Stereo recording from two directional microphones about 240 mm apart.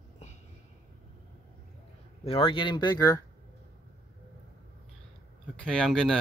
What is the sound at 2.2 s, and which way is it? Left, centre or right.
Speech, left.